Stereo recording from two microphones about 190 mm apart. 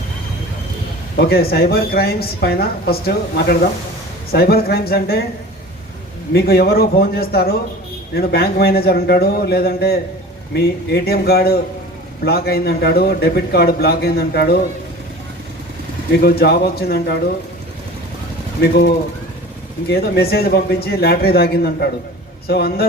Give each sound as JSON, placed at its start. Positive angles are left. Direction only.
{"t": 1.1, "sound": "a woman's voice", "side_deg": 55}
{"t": 6.3, "sound": "a man's voice", "side_deg": 55}
{"t": 16.2, "sound": "a woman's voice", "side_deg": 55}
{"t": 18.6, "sound": "a woman's voice", "side_deg": 55}